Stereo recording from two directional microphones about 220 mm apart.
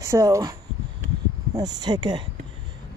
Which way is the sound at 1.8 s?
20° right (ahead or behind).